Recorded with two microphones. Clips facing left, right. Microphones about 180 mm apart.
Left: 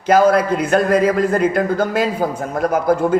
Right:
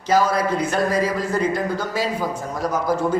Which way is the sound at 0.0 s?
55° left (ahead or behind).